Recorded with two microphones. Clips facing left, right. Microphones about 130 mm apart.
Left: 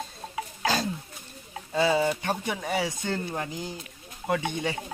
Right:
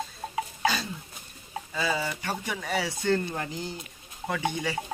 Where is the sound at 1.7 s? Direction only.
25° left (ahead or behind).